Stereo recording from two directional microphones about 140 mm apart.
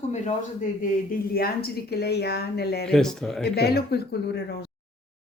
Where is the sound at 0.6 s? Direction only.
75° left (ahead or behind).